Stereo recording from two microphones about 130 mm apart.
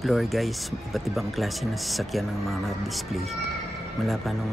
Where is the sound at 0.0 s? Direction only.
Centre (ahead or behind).